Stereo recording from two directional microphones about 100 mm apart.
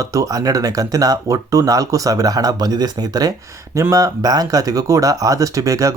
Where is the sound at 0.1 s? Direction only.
35° right (ahead or behind).